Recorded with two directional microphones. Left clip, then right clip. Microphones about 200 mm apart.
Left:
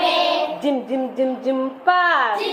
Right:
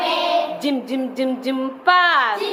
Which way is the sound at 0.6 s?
20° right (ahead or behind).